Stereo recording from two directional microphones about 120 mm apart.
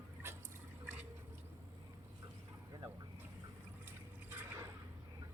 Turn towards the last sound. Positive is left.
turn(degrees=-20)  # may be behind; listen again after turning